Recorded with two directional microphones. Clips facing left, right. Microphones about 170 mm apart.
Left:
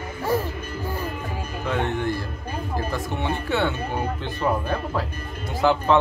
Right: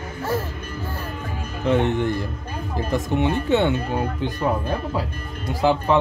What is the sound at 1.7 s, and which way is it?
Speech, 20° right (ahead or behind).